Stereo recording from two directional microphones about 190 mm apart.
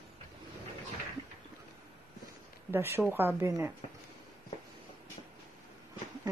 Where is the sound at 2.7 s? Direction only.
10° right (ahead or behind).